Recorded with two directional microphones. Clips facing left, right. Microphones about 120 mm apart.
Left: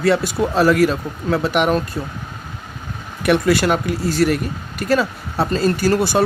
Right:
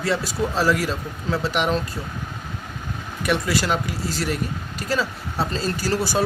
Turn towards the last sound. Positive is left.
turn(degrees=60)  # may be behind; listen again after turning